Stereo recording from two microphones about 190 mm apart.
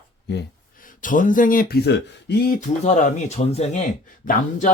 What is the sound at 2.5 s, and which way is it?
Speech, 40° left (ahead or behind).